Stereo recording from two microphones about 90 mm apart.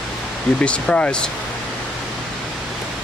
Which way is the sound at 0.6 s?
15° left (ahead or behind).